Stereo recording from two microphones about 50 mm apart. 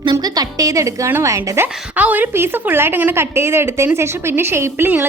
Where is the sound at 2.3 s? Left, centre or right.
Right.